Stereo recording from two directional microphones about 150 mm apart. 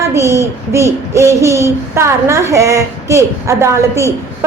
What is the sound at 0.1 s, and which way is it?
Child singing, 20° right (ahead or behind).